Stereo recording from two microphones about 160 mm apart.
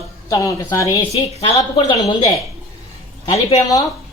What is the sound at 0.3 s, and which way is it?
Speech, 20° left (ahead or behind).